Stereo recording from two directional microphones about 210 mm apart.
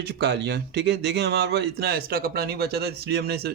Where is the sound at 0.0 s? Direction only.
55° right (ahead or behind).